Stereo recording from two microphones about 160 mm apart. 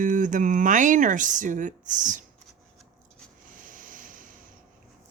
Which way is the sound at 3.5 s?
60° right (ahead or behind).